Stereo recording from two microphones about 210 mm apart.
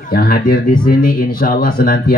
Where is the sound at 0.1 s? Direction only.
45° left (ahead or behind).